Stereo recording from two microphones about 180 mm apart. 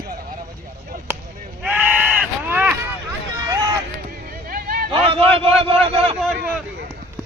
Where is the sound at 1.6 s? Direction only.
10° right (ahead or behind).